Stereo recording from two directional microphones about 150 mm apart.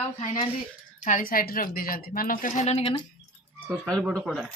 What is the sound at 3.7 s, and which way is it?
Speech, 5° left (ahead or behind).